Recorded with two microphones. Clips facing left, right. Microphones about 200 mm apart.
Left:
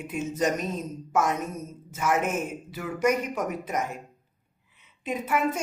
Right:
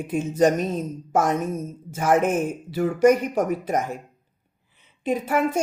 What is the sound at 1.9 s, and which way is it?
A woman's voice, 35° right (ahead or behind).